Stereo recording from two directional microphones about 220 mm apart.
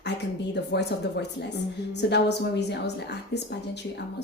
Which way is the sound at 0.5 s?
50° left (ahead or behind).